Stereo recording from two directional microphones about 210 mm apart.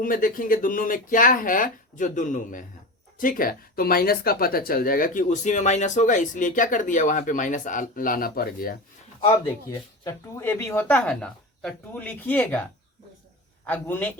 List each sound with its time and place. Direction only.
0.0 s speech: 40° left (ahead or behind)
9.2 s speech: 20° left (ahead or behind)
13.7 s speech: 10° left (ahead or behind)